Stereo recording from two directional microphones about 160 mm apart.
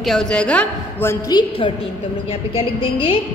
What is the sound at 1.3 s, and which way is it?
Speech, 30° left (ahead or behind).